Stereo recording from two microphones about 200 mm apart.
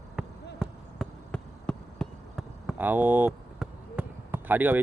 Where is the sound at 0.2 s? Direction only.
5° right (ahead or behind).